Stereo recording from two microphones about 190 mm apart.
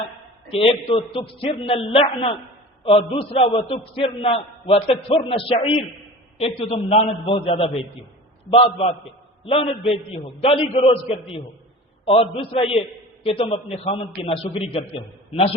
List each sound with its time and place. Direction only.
0.5 s a man's voice: 30° left (ahead or behind)
9.5 s a man's voice: 30° left (ahead or behind)